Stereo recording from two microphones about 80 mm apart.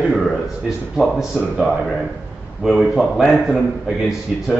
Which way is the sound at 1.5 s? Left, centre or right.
Centre.